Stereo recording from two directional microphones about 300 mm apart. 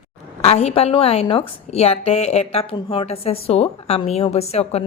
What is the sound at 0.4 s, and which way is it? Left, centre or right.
Speech, centre.